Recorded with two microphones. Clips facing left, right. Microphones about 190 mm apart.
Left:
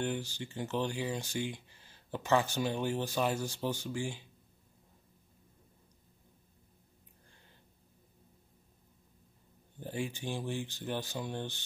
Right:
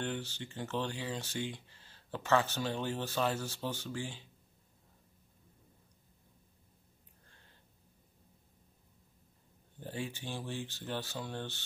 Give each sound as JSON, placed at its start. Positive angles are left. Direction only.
{"t": 0.0, "sound": "speech", "side_deg": 10}
{"t": 9.8, "sound": "speech", "side_deg": 15}